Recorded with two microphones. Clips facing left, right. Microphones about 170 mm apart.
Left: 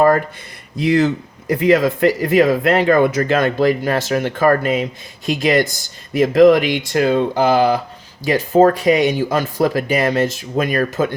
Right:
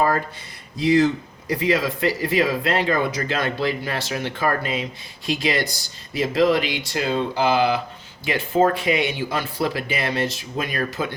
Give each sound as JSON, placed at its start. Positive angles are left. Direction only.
{"t": 0.8, "sound": "speech", "side_deg": 55}